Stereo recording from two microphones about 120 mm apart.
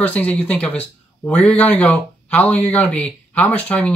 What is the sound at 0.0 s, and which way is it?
Speech, 10° left (ahead or behind).